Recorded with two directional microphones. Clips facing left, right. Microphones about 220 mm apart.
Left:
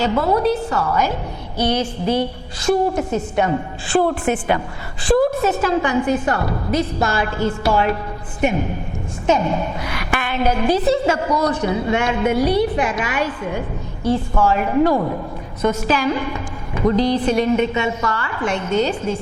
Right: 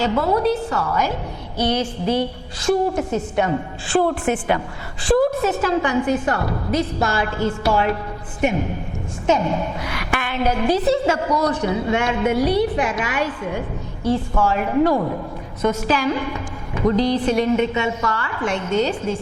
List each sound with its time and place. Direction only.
0.0 s a woman's voice: 15° left (ahead or behind)
15.6 s a woman's voice: 10° left (ahead or behind)